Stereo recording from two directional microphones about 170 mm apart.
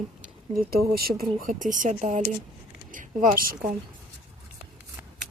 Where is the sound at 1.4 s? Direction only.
50° right (ahead or behind).